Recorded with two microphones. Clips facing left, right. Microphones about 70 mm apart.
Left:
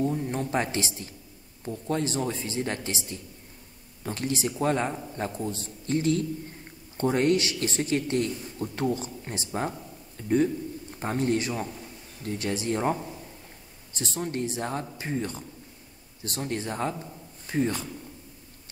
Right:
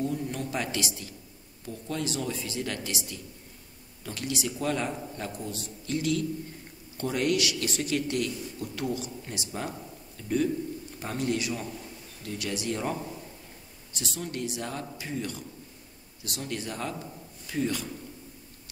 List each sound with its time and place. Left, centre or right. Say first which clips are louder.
0.0 s a man's voice: left 3 dB; left